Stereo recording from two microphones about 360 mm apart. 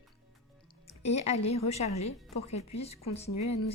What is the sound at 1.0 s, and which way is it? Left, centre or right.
Speech, centre.